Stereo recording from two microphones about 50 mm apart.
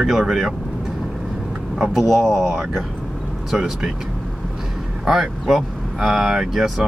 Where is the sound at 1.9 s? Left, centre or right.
Centre.